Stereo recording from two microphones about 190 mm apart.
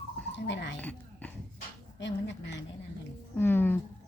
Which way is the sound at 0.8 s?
10° left (ahead or behind).